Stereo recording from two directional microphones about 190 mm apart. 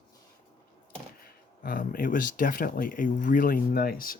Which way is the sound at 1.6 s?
45° left (ahead or behind).